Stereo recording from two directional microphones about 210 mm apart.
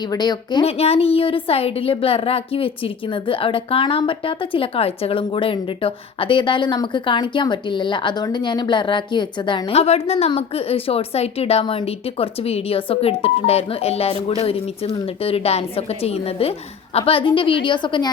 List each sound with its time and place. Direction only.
0.1 s a woman's voice: 20° left (ahead or behind)